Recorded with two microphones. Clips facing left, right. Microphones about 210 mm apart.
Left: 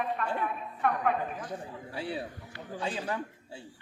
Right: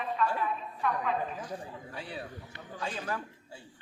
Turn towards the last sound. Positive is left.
turn(degrees=30)  # may be behind; listen again after turning